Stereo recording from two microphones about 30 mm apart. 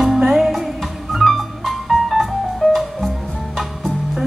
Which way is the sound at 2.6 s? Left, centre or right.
Left.